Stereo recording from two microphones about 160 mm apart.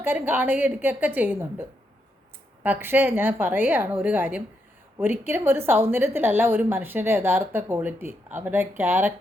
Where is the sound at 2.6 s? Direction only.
10° right (ahead or behind).